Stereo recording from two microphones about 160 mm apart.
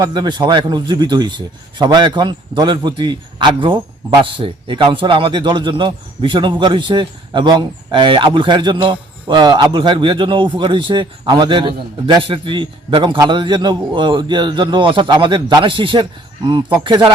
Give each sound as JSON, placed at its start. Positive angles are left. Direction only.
{"t": 0.0, "sound": "a man's voice", "side_deg": -25}